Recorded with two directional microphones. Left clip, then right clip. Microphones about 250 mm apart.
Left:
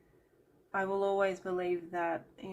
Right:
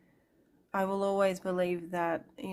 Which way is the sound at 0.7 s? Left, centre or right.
Right.